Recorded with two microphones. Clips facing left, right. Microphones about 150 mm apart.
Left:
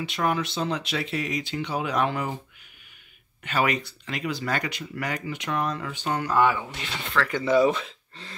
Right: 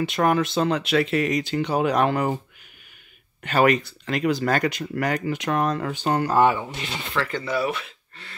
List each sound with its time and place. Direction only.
0.0 s speech: 50° right (ahead or behind)
1.4 s speech: 40° right (ahead or behind)
2.0 s speech: 50° right (ahead or behind)
3.4 s speech: 50° right (ahead or behind); by 7.0 s 30° right (ahead or behind)
7.2 s speech: 15° left (ahead or behind)